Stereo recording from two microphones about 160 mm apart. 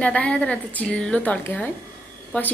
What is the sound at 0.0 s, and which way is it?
A woman's voice, 10° left (ahead or behind).